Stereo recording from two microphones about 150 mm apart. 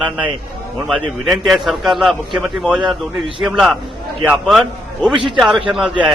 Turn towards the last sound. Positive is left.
turn(degrees=-5)  # may be behind; listen again after turning